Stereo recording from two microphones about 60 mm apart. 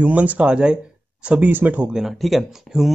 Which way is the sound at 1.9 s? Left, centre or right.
Centre.